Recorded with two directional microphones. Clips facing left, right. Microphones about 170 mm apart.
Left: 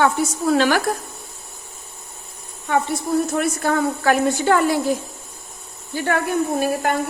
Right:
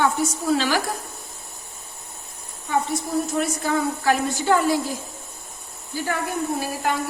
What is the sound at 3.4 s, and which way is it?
A woman's voice, 60° left (ahead or behind).